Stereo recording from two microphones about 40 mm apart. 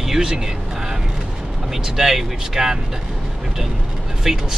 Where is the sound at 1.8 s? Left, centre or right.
Centre.